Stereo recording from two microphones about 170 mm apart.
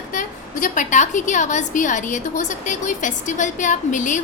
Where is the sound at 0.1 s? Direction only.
50° left (ahead or behind).